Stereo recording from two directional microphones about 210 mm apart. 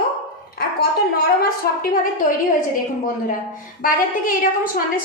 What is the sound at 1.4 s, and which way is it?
Speech, 45° left (ahead or behind).